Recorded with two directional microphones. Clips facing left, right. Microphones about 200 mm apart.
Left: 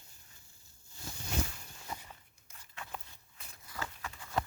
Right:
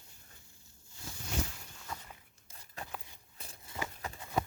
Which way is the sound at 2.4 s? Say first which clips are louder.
Right 3 dB; 35° right (ahead or behind).